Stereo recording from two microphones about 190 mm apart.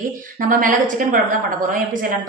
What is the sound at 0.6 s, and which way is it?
Speech, 45° right (ahead or behind).